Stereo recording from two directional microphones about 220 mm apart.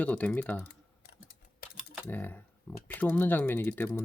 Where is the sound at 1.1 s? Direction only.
45° left (ahead or behind).